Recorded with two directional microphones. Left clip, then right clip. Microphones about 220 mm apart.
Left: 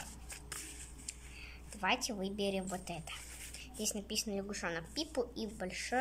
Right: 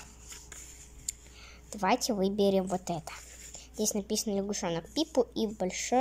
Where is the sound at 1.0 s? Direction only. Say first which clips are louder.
Right 7 dB; 20° right (ahead or behind).